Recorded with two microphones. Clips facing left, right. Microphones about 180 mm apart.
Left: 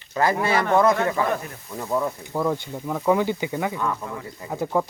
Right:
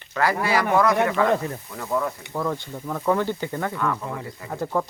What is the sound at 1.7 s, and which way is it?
Speech, 20° left (ahead or behind).